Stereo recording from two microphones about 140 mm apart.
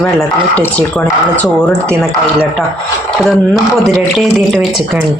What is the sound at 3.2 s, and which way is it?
Speech, centre (ahead or behind).